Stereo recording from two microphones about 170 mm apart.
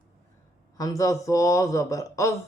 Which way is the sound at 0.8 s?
20° left (ahead or behind).